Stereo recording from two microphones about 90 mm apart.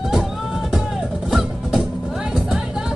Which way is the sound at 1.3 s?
Centre (ahead or behind).